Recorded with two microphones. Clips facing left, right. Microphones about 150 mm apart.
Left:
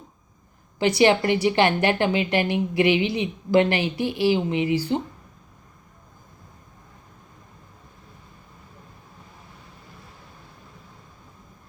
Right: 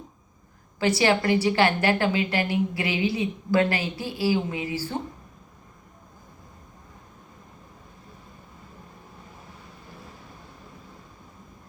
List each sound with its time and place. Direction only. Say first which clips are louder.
0.8 s a woman's voice: left 4 dB; 20° left (ahead or behind)